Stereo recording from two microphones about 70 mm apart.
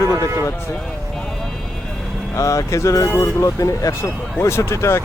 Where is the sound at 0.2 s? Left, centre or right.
Right.